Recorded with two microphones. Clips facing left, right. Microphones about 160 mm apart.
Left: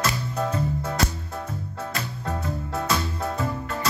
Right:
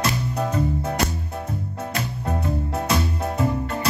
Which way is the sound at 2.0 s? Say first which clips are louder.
Right 4 dB; 20° right (ahead or behind).